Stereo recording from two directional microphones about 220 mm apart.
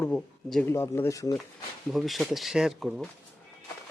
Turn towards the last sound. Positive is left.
turn(degrees=0)  # may be behind; listen again after turning